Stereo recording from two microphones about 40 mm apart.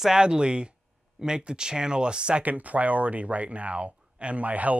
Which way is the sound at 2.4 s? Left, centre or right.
Right.